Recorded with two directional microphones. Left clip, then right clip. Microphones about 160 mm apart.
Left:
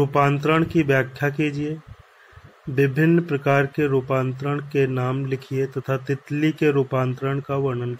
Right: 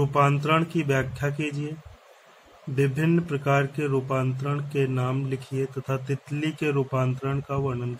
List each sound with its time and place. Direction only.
0.0 s speech: 25° left (ahead or behind)
2.7 s speech: 20° left (ahead or behind)